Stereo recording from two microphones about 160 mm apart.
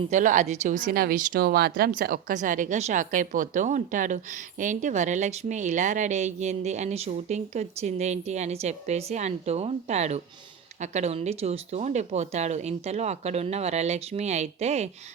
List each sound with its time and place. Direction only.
0.1 s speech: 50° right (ahead or behind)
0.9 s speech: 70° right (ahead or behind); by 14.8 s 45° right (ahead or behind)